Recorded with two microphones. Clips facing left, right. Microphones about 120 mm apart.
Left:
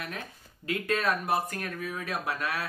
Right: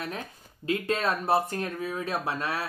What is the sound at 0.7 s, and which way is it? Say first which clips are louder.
Speech: right 2 dB; 25° right (ahead or behind).